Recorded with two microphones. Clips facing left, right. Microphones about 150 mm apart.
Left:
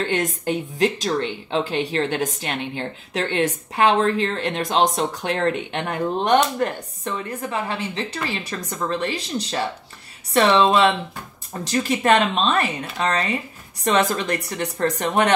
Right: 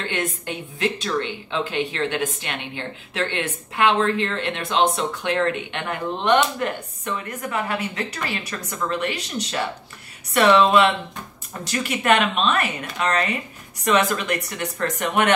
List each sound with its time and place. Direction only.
0.0 s a woman's voice: 40° left (ahead or behind)